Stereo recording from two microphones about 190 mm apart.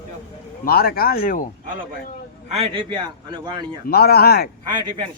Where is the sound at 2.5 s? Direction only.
30° right (ahead or behind).